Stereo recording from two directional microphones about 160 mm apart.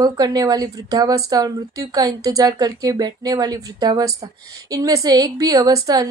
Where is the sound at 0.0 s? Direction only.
25° right (ahead or behind).